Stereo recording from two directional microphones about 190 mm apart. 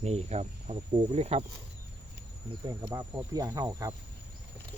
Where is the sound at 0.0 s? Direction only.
35° right (ahead or behind).